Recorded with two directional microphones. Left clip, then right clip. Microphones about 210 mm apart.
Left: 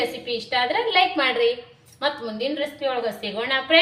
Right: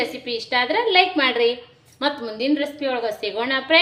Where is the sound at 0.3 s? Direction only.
50° right (ahead or behind).